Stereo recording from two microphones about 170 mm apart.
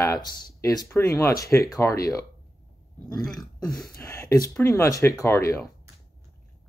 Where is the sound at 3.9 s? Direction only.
15° left (ahead or behind).